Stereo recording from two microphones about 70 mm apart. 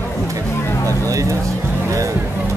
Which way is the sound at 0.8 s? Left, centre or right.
Right.